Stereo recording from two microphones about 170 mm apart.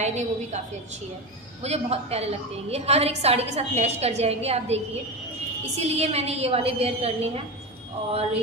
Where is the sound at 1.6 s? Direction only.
40° right (ahead or behind).